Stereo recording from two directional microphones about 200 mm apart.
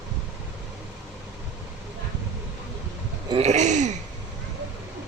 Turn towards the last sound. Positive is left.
turn(degrees=-35)  # may be behind; listen again after turning